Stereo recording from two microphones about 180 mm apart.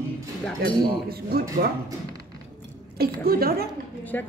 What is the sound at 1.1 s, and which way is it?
Speech, 60° right (ahead or behind).